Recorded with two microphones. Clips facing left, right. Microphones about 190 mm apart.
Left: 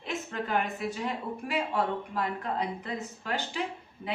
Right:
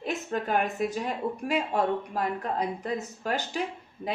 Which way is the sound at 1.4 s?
45° right (ahead or behind).